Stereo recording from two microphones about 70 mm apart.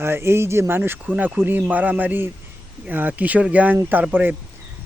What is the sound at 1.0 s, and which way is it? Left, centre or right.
A man's voice, right.